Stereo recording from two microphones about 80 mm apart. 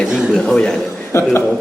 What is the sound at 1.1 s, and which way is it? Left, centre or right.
Speech, left.